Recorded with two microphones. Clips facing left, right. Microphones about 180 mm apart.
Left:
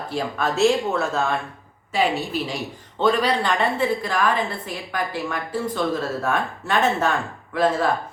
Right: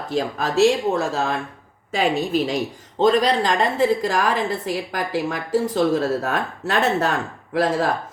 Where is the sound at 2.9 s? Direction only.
40° right (ahead or behind).